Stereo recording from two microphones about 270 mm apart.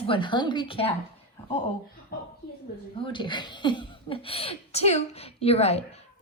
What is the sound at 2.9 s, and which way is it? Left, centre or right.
Speech, centre.